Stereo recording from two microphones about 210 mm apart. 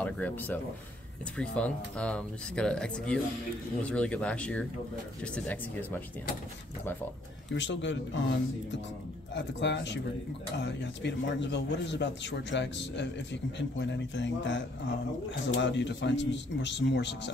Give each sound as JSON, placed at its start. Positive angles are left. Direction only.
{"t": 0.0, "sound": "speech", "side_deg": 5}
{"t": 7.5, "sound": "a man's voice", "side_deg": 60}